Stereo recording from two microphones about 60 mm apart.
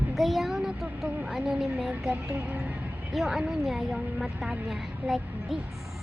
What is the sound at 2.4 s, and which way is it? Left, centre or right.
Speech, right.